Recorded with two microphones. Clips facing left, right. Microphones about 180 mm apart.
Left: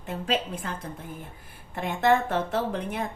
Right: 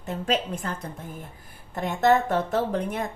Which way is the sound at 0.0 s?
45° right (ahead or behind).